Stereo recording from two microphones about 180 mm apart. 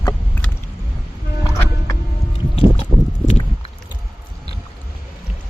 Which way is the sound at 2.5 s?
35° left (ahead or behind).